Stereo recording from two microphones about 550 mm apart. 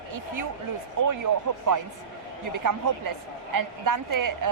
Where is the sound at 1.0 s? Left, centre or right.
Right.